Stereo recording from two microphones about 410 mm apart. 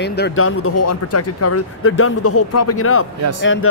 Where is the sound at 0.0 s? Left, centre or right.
Left.